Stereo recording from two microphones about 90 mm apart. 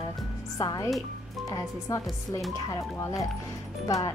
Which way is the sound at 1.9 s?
40° left (ahead or behind).